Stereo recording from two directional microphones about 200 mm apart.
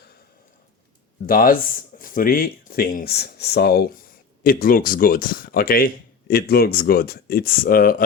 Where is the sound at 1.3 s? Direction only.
45° left (ahead or behind).